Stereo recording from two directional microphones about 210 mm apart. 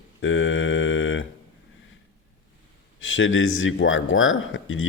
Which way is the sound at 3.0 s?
65° left (ahead or behind).